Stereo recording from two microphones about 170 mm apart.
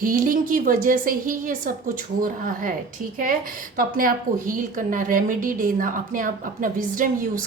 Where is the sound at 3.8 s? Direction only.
55° right (ahead or behind).